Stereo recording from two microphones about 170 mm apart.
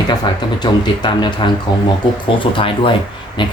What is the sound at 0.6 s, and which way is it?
Speech, 25° left (ahead or behind).